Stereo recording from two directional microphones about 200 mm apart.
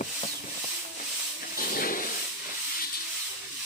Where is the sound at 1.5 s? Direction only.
45° left (ahead or behind).